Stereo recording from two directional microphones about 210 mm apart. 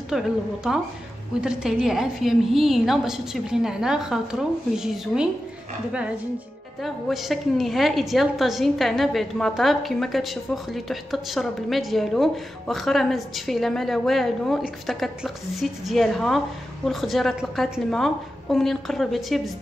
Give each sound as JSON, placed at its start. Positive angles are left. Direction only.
{"t": 0.1, "sound": "a woman's voice", "side_deg": 0}
{"t": 1.4, "sound": "a woman's voice", "side_deg": -5}
{"t": 6.8, "sound": "a woman's voice", "side_deg": 0}